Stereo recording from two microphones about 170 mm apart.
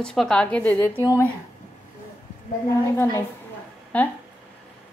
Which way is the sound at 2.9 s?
15° left (ahead or behind).